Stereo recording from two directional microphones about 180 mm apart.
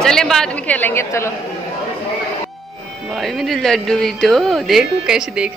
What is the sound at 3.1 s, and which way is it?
Speech, centre (ahead or behind).